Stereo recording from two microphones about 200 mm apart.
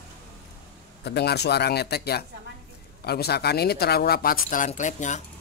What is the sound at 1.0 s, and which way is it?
Speech, 55° left (ahead or behind).